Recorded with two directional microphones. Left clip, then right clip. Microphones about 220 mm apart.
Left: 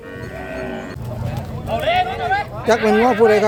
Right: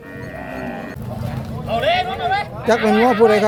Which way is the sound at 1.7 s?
25° right (ahead or behind).